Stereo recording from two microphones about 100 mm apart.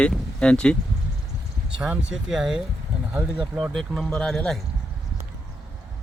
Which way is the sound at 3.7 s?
5° left (ahead or behind).